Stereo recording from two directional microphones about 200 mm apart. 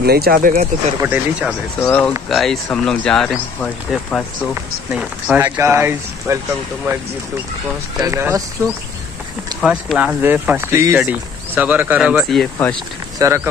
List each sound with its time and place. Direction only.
0.0 s speech: 50° right (ahead or behind)
1.0 s speech: 10° right (ahead or behind)
1.8 s speech: 5° left (ahead or behind)
4.9 s speech: 10° right (ahead or behind)
8.0 s speech: 15° right (ahead or behind)
9.6 s speech: centre (ahead or behind)